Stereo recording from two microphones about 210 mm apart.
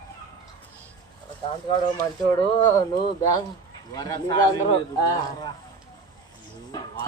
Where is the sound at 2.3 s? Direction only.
20° left (ahead or behind).